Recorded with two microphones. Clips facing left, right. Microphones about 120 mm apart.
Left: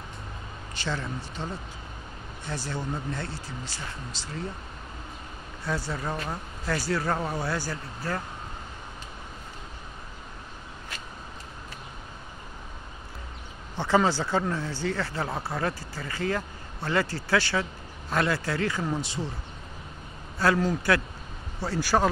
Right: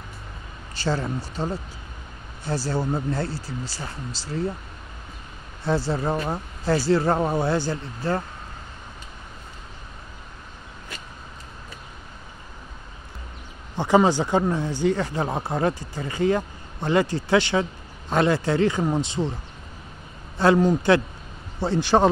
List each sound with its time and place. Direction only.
0.7 s speech: 35° right (ahead or behind)
5.6 s speech: 30° right (ahead or behind)
13.7 s speech: 15° right (ahead or behind)
20.3 s speech: 20° right (ahead or behind)